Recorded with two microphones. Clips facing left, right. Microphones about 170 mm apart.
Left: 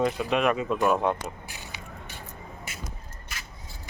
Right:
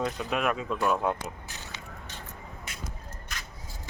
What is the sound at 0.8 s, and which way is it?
Speech, 15° left (ahead or behind).